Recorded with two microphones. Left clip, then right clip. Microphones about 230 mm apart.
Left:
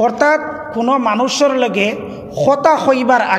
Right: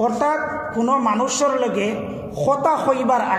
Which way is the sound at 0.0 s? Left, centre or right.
Left.